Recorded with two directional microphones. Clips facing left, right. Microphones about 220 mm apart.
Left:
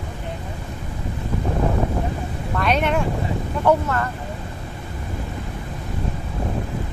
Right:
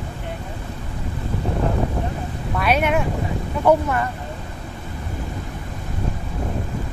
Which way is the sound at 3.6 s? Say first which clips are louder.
Right 2 dB; 15° right (ahead or behind).